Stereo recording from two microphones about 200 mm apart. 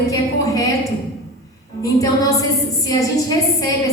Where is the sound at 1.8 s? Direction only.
20° left (ahead or behind).